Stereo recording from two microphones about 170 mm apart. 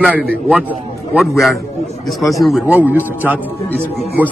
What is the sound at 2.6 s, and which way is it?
Speech, 10° right (ahead or behind).